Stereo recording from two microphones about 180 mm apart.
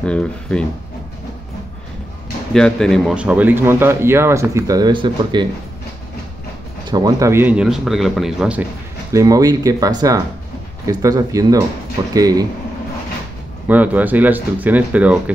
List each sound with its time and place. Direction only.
0.0 s speech: 5° left (ahead or behind)
2.5 s speech: 5° left (ahead or behind); by 5.5 s 25° right (ahead or behind)
6.9 s speech: 20° right (ahead or behind); by 8.6 s 5° right (ahead or behind)
9.1 s speech: 20° right (ahead or behind)
13.7 s speech: 10° right (ahead or behind)